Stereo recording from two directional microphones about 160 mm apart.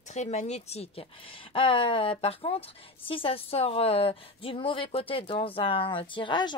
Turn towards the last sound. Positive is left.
turn(degrees=30)  # may be behind; listen again after turning